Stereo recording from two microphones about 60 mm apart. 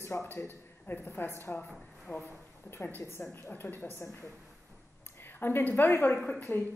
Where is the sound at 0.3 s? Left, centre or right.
Left.